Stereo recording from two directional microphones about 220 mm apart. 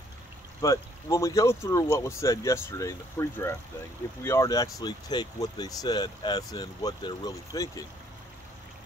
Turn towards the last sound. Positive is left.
turn(degrees=15)  # may be behind; listen again after turning